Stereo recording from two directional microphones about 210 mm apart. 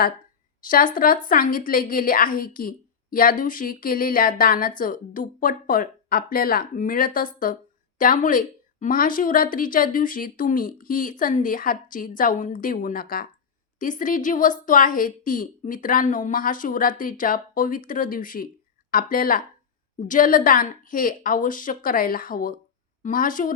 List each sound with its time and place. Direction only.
0.6 s a woman's voice: 40° left (ahead or behind)